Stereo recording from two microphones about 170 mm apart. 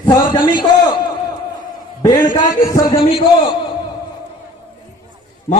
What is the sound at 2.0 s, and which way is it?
A man's voice, 25° left (ahead or behind).